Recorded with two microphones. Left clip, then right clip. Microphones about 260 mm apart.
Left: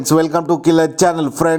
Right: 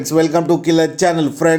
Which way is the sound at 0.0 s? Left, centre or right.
Left.